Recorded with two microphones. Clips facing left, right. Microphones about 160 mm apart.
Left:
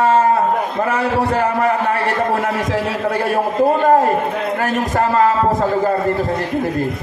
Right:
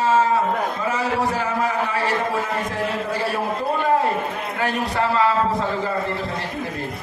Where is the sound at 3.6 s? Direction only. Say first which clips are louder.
Left 7 dB; 45° left (ahead or behind).